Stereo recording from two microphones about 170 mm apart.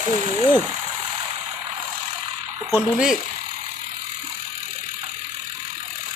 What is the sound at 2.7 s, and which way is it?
Speech, 5° right (ahead or behind).